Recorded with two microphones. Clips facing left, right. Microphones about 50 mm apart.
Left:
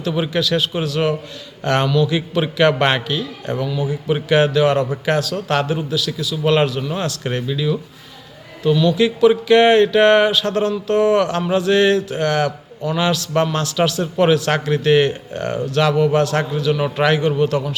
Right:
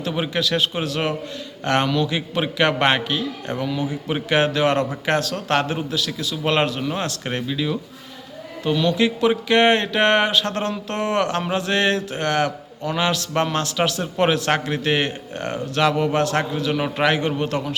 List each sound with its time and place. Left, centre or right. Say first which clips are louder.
0.3 s a man's voice: left 1 dB; right
3.6 s a man's voice: left 2 dB; right
8.6 s a man's voice: left 4 dB; right
17.3 s a man's voice: left 5 dB; right